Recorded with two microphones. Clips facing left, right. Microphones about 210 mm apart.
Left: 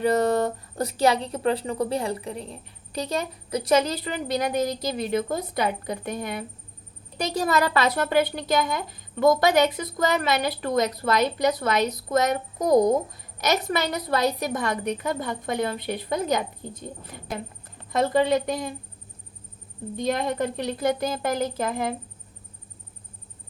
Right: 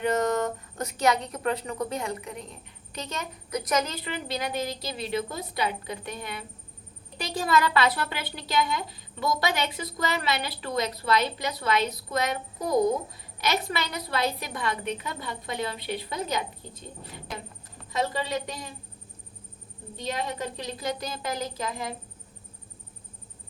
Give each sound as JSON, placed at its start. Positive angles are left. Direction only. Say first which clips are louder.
{"t": 0.0, "sound": "a woman's voice", "louder": "left 4 dB", "side_deg": 35}
{"t": 20.0, "sound": "a woman's voice", "louder": "left 7 dB", "side_deg": 50}